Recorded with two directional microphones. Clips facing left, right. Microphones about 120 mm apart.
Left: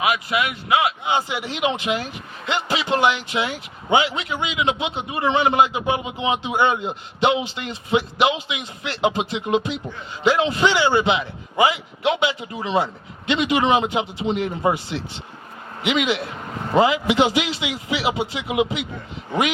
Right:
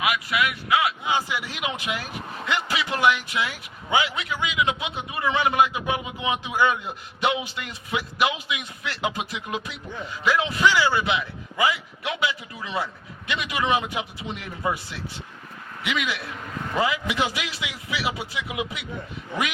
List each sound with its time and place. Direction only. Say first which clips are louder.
0.0 s a man's voice: left 3 dB; 25° left (ahead or behind)